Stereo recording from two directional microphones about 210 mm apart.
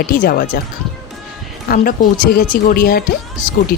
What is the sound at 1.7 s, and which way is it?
Speech, 45° left (ahead or behind).